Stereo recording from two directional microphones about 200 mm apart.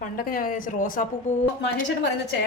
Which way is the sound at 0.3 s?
45° left (ahead or behind).